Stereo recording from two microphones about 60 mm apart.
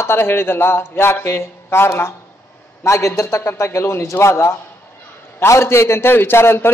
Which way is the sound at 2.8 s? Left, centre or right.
Left.